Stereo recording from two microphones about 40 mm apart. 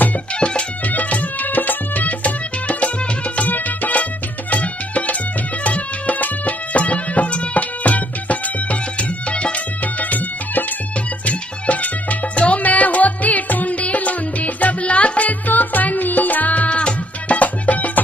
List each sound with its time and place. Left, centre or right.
0.4 s music: left
0.8 s music: left
11.2 s music: left